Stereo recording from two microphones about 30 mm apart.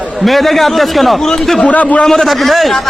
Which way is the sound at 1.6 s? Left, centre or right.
Left.